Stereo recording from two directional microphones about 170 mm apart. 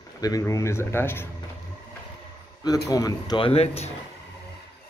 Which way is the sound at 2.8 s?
20° left (ahead or behind).